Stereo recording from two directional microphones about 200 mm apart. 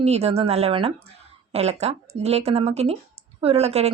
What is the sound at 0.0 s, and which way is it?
Speech, 30° right (ahead or behind).